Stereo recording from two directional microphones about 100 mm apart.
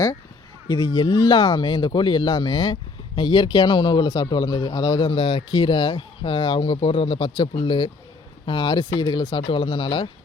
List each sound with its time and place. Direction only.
0.7 s speech: 45° left (ahead or behind)
6.7 s speech: 65° left (ahead or behind)